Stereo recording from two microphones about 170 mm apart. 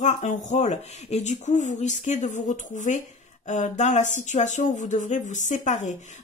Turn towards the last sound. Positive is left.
turn(degrees=45)  # may be behind; listen again after turning